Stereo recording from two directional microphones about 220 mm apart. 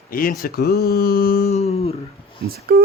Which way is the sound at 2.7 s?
45° right (ahead or behind).